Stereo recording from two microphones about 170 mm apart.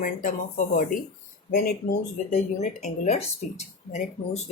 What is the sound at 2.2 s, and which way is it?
Speech, 45° left (ahead or behind).